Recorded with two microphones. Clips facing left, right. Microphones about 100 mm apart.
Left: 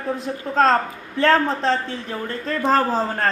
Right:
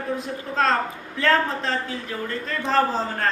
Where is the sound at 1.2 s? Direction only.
35° left (ahead or behind).